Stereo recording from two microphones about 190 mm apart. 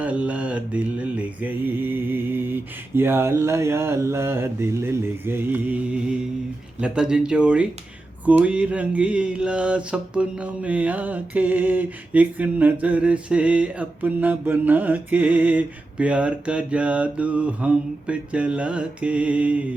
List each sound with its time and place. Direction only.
0.0 s mantra: 5° right (ahead or behind)
6.7 s speech: 5° right (ahead or behind)
8.2 s mantra: 10° right (ahead or behind)